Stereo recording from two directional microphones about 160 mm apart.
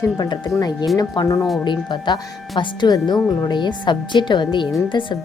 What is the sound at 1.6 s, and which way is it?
Speech, 30° left (ahead or behind).